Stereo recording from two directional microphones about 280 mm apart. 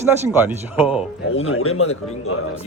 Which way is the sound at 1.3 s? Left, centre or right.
Left.